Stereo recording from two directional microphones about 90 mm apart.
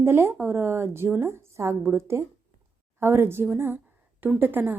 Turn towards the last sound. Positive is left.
turn(degrees=-20)  # may be behind; listen again after turning